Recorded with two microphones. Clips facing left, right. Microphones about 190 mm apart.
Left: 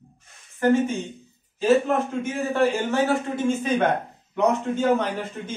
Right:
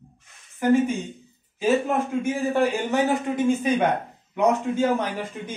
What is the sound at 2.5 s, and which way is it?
A man's voice, 15° right (ahead or behind).